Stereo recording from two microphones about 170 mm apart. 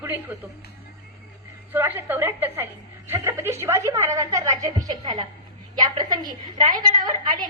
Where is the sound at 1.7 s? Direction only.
10° right (ahead or behind).